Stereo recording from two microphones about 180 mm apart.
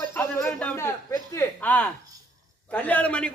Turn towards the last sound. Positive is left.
turn(degrees=5)  # may be behind; listen again after turning